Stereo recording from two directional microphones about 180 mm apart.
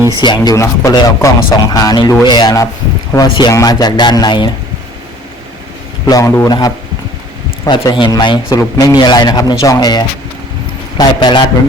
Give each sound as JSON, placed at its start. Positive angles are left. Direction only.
{"t": 0.2, "sound": "speech", "side_deg": 25}
{"t": 6.1, "sound": "speech", "side_deg": 20}